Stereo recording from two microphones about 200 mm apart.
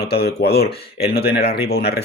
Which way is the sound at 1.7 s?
50° left (ahead or behind).